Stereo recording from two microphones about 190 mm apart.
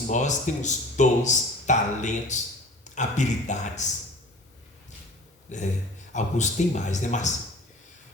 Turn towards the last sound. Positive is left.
turn(degrees=40)  # may be behind; listen again after turning